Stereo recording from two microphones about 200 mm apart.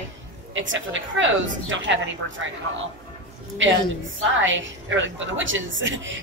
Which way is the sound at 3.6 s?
70° right (ahead or behind).